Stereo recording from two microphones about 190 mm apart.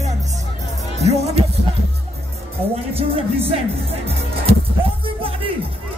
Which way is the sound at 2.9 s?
30° right (ahead or behind).